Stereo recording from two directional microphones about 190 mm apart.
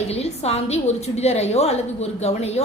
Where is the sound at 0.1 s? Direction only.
35° left (ahead or behind).